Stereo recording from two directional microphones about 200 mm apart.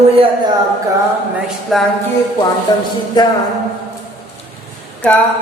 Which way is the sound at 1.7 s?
Centre (ahead or behind).